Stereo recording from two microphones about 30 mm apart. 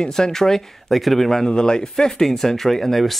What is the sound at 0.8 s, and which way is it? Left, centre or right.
Speech, centre.